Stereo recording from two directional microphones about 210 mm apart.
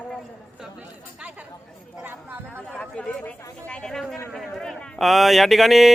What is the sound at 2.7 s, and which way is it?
Speech, 5° left (ahead or behind).